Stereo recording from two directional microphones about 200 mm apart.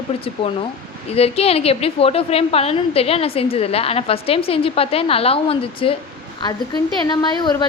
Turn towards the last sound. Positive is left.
turn(degrees=20)  # may be behind; listen again after turning